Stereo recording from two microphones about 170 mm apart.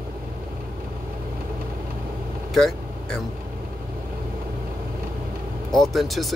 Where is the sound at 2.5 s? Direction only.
Centre (ahead or behind).